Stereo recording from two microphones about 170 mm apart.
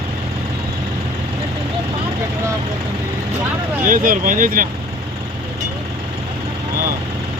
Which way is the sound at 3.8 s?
55° right (ahead or behind).